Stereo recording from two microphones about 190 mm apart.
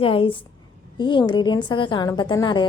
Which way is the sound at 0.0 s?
30° left (ahead or behind).